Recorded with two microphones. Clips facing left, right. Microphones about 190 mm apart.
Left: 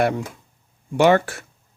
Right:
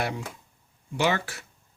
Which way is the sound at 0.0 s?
55° left (ahead or behind).